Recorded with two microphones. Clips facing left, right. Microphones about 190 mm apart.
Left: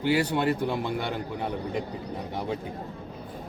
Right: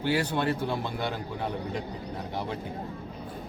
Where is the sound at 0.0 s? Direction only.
15° left (ahead or behind).